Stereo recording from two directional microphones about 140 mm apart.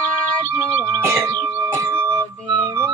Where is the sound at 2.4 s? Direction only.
30° right (ahead or behind).